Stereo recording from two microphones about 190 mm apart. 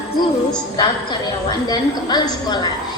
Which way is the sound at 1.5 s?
20° left (ahead or behind).